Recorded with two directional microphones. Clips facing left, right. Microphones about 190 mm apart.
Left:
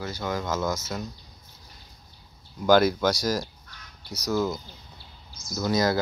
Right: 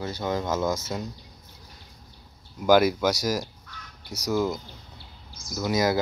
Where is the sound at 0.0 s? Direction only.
20° right (ahead or behind).